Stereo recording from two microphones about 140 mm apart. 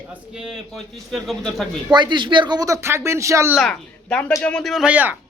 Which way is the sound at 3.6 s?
5° left (ahead or behind).